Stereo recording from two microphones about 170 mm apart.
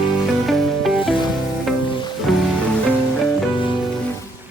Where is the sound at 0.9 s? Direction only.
30° left (ahead or behind).